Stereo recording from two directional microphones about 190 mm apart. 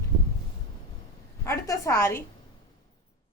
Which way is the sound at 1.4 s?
15° left (ahead or behind).